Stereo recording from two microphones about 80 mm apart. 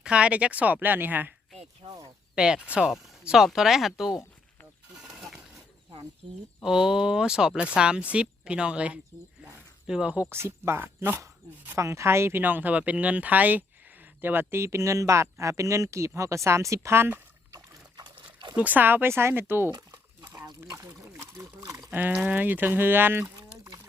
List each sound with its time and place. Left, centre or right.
0.0 s speech: centre
2.3 s speech: centre
4.9 s goat: centre
6.6 s speech: centre
9.4 s a sound: centre
10.2 s speech: right
11.8 s speech: right
17.9 s a sound: right
18.5 s speech: centre
20.7 s a sound: right
21.9 s speech: right